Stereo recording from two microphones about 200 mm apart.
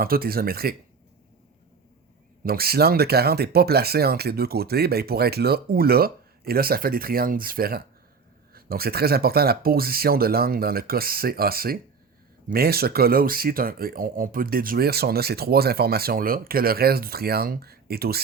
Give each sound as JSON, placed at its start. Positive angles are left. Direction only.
{"t": 0.0, "sound": "speech", "side_deg": -50}
{"t": 2.4, "sound": "speech", "side_deg": -50}